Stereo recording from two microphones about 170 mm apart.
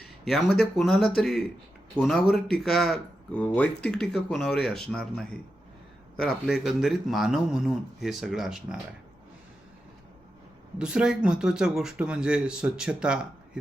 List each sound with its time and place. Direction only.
0.0 s speech: centre (ahead or behind)
10.8 s speech: 5° right (ahead or behind)